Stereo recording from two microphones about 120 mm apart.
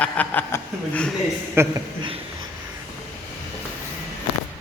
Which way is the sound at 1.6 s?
20° right (ahead or behind).